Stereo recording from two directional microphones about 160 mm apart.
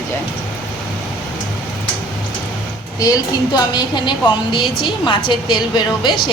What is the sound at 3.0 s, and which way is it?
A woman's voice, 25° left (ahead or behind).